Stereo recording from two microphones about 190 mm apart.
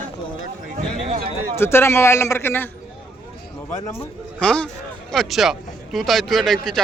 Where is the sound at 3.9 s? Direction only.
10° left (ahead or behind).